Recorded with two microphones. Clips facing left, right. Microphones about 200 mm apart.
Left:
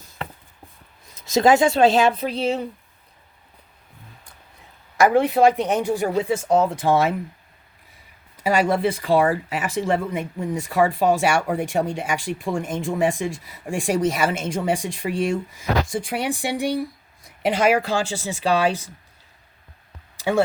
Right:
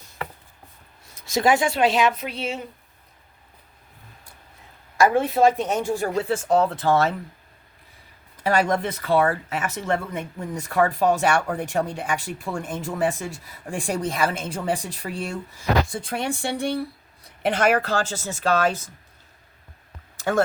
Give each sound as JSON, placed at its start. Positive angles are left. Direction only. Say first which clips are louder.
{"t": 1.2, "sound": "speech", "louder": "left 4 dB", "side_deg": 20}
{"t": 4.9, "sound": "speech", "louder": "left 2 dB", "side_deg": 15}
{"t": 8.4, "sound": "speech", "louder": "left 2 dB", "side_deg": 10}